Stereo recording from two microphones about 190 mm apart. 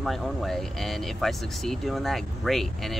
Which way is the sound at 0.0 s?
Centre (ahead or behind).